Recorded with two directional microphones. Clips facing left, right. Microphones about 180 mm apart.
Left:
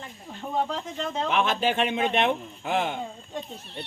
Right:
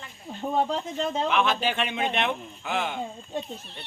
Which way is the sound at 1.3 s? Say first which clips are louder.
Left 4 dB; 45° left (ahead or behind).